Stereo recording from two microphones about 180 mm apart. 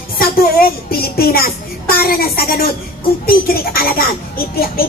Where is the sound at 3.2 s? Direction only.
55° left (ahead or behind).